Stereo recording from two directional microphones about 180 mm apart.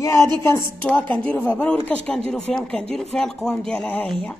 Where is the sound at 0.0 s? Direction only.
15° left (ahead or behind).